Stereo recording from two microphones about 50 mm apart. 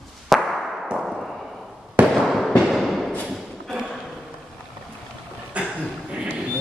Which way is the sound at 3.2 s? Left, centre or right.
Centre.